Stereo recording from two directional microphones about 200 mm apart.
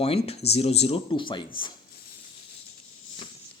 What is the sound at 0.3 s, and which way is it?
Speech, 30° left (ahead or behind).